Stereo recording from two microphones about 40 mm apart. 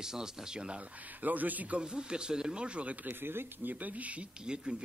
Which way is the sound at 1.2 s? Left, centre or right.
Right.